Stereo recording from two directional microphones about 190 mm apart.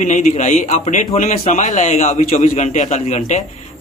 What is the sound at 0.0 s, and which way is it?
A man's voice, 35° left (ahead or behind).